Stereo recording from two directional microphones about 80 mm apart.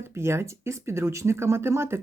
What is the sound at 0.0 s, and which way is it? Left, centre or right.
Speech, right.